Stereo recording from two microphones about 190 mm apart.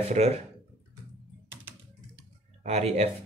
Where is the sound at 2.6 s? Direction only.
35° right (ahead or behind).